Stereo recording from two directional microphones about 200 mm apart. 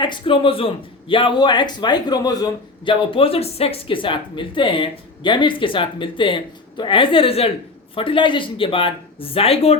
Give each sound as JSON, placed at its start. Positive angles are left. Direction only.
{"t": 0.0, "sound": "a man's voice", "side_deg": 25}